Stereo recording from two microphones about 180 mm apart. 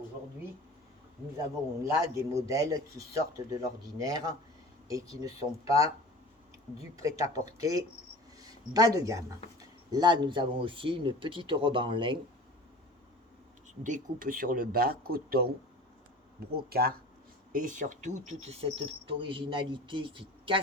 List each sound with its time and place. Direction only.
1.8 s speech: 15° right (ahead or behind)
7.3 s speech: 20° right (ahead or behind)
13.8 s speech: 45° right (ahead or behind)
16.6 s speech: 60° right (ahead or behind); by 20.6 s 30° right (ahead or behind)